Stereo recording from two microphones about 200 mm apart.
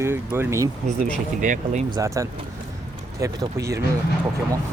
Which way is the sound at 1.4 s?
40° right (ahead or behind).